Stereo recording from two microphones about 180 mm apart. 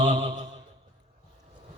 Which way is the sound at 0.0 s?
30° right (ahead or behind).